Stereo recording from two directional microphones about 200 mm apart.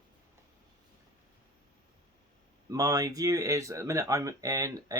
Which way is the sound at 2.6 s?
20° right (ahead or behind).